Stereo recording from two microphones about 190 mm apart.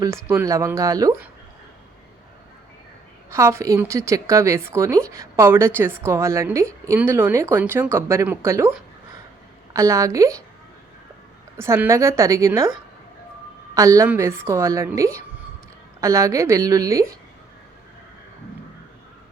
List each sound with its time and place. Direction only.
0.0 s a woman's voice: 15° right (ahead or behind)
3.2 s a woman's voice: 15° right (ahead or behind)
9.7 s a woman's voice: 15° right (ahead or behind)
11.5 s a woman's voice: 15° right (ahead or behind)
13.7 s a woman's voice: 15° right (ahead or behind)